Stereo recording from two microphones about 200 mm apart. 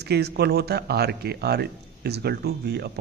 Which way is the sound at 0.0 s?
55° right (ahead or behind).